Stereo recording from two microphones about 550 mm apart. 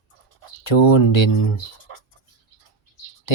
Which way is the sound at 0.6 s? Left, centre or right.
Left.